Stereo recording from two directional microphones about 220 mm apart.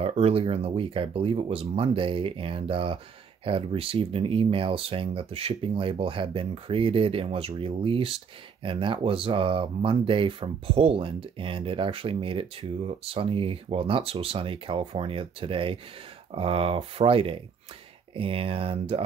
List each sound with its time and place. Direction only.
0.0 s speech: 25° right (ahead or behind)